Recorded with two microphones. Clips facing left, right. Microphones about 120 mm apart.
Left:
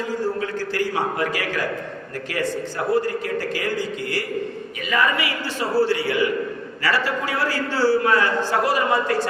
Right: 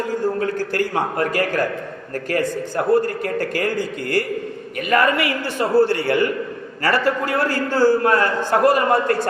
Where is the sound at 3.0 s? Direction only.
50° right (ahead or behind).